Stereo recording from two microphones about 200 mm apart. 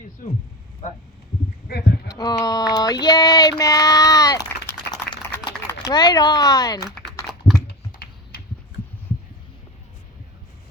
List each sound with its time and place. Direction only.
1.6 s sheep: 55° left (ahead or behind)
2.0 s a sound: 20° left (ahead or behind)
7.7 s computer keyboard: 50° left (ahead or behind)